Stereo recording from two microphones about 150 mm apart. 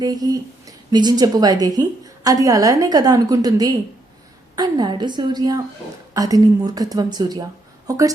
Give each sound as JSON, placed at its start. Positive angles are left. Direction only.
{"t": 0.0, "sound": "speech", "side_deg": -25}